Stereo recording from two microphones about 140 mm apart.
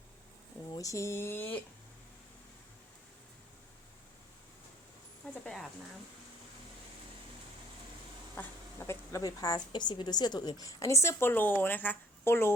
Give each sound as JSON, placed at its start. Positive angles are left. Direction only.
{"t": 0.7, "sound": "a woman's voice", "side_deg": 25}
{"t": 5.3, "sound": "speech", "side_deg": 0}
{"t": 8.9, "sound": "a woman's voice", "side_deg": 25}